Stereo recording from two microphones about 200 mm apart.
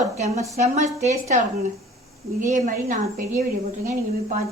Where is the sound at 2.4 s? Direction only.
40° right (ahead or behind).